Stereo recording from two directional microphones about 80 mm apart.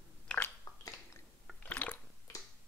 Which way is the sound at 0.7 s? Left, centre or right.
Left.